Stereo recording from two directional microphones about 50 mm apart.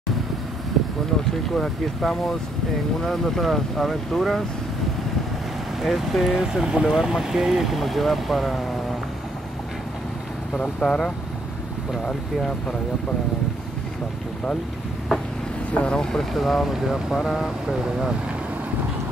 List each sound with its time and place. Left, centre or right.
1.5 s speech: centre
5.8 s speech: centre
6.3 s speech: centre
10.5 s speech: left
12.1 s speech: centre
15.7 s speech: left
16.0 s speech: centre
17.7 s speech: centre